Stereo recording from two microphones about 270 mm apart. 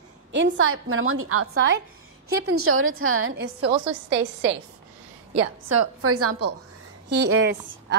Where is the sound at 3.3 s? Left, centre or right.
Right.